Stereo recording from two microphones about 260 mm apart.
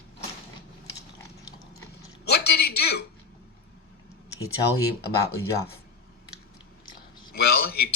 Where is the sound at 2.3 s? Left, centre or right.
Left.